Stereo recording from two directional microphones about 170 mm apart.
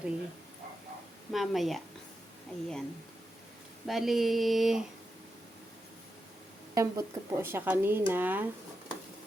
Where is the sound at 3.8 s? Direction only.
Centre (ahead or behind).